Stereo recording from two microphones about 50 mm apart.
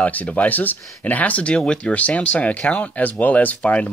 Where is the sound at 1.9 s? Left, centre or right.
Left.